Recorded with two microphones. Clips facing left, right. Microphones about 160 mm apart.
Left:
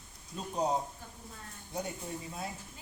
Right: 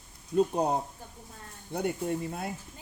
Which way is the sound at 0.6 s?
60° right (ahead or behind).